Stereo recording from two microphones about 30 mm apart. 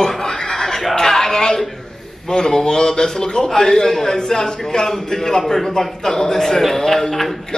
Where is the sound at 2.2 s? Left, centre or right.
Left; by 7.3 s centre.